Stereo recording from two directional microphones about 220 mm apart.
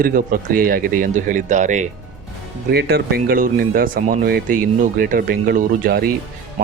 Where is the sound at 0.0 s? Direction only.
40° right (ahead or behind).